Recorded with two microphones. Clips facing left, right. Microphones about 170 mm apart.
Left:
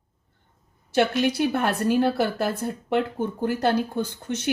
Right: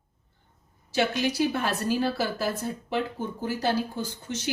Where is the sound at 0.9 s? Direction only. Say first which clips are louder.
Left 4 dB; 55° left (ahead or behind).